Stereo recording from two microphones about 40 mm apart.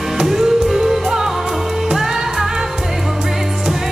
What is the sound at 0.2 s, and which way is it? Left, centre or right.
Music, centre.